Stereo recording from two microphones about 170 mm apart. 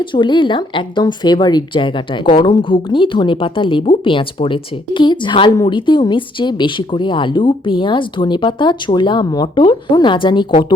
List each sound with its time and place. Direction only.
0.0 s speech: 30° left (ahead or behind)